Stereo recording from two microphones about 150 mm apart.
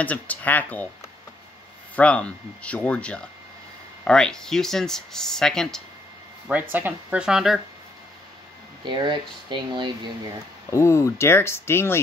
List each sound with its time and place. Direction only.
0.0 s speech: 10° left (ahead or behind)
2.0 s speech: 10° left (ahead or behind)
6.7 s speech: 10° right (ahead or behind)
8.8 s speech: 30° right (ahead or behind)
10.7 s speech: 20° left (ahead or behind)